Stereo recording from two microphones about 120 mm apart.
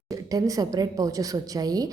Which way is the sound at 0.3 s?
30° right (ahead or behind).